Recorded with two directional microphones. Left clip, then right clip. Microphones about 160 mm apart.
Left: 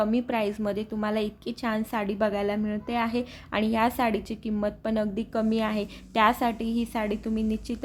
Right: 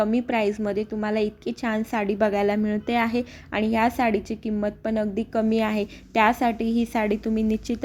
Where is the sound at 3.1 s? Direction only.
10° right (ahead or behind).